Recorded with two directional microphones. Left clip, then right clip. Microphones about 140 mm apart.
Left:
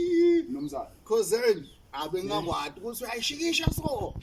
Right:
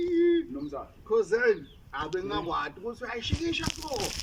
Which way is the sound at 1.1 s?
20° left (ahead or behind).